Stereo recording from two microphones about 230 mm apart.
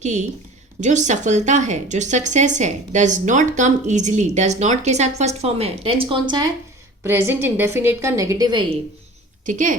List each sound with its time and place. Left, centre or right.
0.0 s a woman's voice: right
9.5 s speech: right